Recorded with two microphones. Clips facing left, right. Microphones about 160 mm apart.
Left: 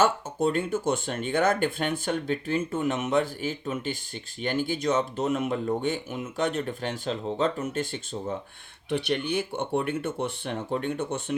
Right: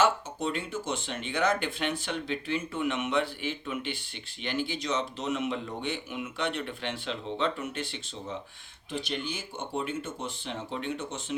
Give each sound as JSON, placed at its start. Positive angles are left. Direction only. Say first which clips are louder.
{"t": 0.0, "sound": "speech", "louder": "left 3 dB", "side_deg": 50}
{"t": 8.9, "sound": "speech", "louder": "left 7 dB", "side_deg": 65}